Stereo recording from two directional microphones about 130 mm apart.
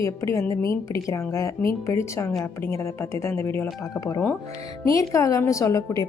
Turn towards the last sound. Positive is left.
turn(degrees=25)  # may be behind; listen again after turning